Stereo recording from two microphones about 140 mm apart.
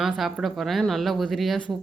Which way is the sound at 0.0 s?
Centre (ahead or behind).